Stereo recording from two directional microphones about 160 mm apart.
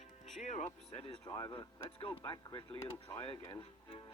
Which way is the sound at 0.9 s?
35° left (ahead or behind).